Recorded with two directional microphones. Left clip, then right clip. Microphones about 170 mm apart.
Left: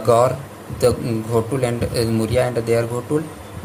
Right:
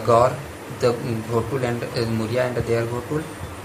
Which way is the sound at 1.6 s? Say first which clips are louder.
Left 4 dB; 55° left (ahead or behind).